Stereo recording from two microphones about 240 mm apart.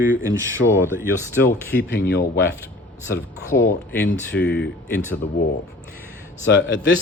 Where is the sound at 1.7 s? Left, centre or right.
Left.